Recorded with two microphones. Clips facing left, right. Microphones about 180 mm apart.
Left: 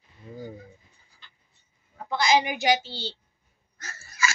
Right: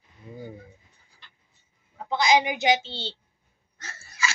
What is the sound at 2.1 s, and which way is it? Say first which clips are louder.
A woman's voice: right 1 dB; 20° right (ahead or behind).